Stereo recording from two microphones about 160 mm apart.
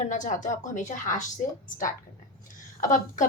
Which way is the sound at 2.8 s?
50° left (ahead or behind).